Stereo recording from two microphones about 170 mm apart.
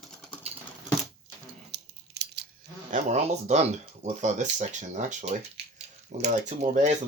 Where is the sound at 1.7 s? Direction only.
80° right.